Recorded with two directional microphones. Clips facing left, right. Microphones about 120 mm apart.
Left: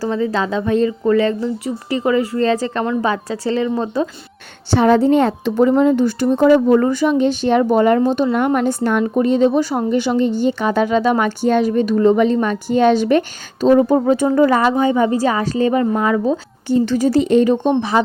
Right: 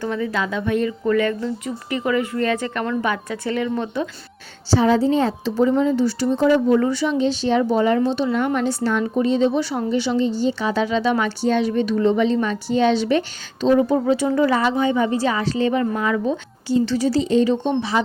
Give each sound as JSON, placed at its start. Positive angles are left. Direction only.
{"t": 0.0, "sound": "speech", "side_deg": 30}
{"t": 4.7, "sound": "a woman's voice", "side_deg": 60}
{"t": 16.8, "sound": "a woman's voice", "side_deg": 50}